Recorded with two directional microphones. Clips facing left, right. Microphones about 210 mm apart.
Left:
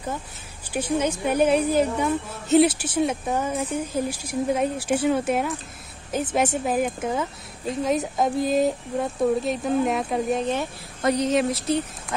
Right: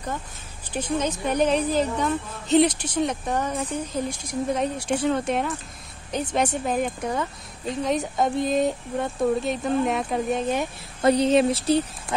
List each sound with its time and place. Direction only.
0.7 s a woman's voice: 10° left (ahead or behind)
11.0 s speech: 30° right (ahead or behind)